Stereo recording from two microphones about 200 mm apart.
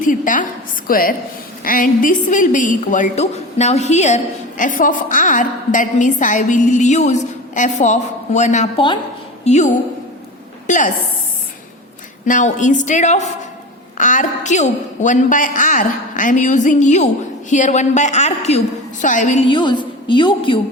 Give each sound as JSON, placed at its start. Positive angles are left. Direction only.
{"t": 0.0, "sound": "a woman's voice", "side_deg": 40}
{"t": 12.2, "sound": "a woman's voice", "side_deg": 40}
{"t": 19.5, "sound": "a woman's voice", "side_deg": 25}